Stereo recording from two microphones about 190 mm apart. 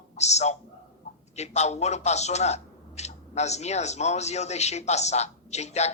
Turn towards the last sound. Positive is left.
turn(degrees=35)  # may be behind; listen again after turning